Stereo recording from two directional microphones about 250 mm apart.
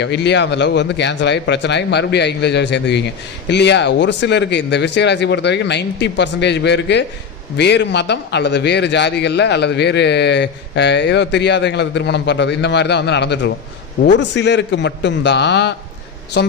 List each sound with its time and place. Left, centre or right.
0.0 s a man's voice: left